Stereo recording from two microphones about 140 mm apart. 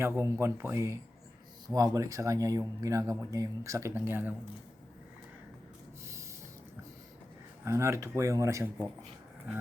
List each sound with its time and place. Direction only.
0.0 s speech: 15° right (ahead or behind)
7.6 s speech: 20° right (ahead or behind)